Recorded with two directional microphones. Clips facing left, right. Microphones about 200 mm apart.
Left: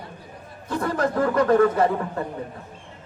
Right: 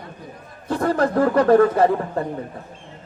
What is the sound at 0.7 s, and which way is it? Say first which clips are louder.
Speech: right 4 dB; 35° right (ahead or behind).